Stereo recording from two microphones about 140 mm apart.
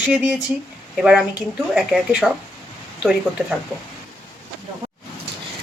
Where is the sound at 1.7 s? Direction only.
10° right (ahead or behind).